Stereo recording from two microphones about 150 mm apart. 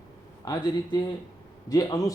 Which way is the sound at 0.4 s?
30° left (ahead or behind).